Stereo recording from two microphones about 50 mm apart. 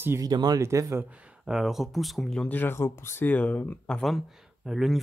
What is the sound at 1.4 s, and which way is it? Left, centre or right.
Speech, centre.